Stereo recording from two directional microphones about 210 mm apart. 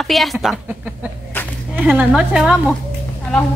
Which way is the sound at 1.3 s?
10° left (ahead or behind).